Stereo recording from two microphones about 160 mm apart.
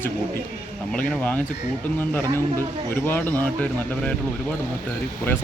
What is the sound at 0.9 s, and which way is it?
Speech, 10° left (ahead or behind).